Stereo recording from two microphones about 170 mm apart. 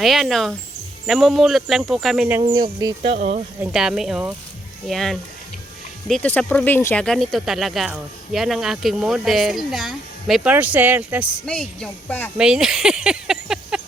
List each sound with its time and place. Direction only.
0.0 s speech: centre (ahead or behind)
2.5 s speech: 25° right (ahead or behind)
3.2 s speech: 50° right (ahead or behind)
3.6 s speech: 5° right (ahead or behind)
11.4 s speech: 5° left (ahead or behind)
12.4 s a sound: 5° right (ahead or behind)